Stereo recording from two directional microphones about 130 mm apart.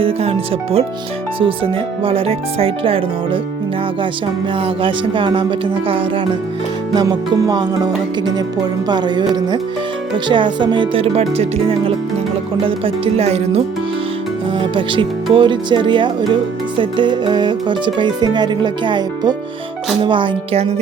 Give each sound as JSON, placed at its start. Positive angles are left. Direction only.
{"t": 0.0, "sound": "speech", "side_deg": -50}
{"t": 1.4, "sound": "speech", "side_deg": -45}
{"t": 4.6, "sound": "speech", "side_deg": -40}
{"t": 6.9, "sound": "speech", "side_deg": -30}
{"t": 8.9, "sound": "speech", "side_deg": -35}
{"t": 14.6, "sound": "speech", "side_deg": -40}